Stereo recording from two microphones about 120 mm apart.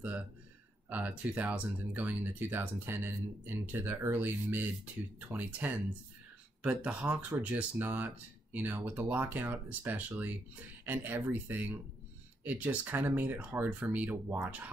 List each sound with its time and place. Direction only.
0.8 s speech: 15° right (ahead or behind)